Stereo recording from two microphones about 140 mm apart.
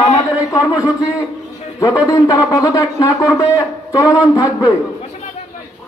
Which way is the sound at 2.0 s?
25° left (ahead or behind).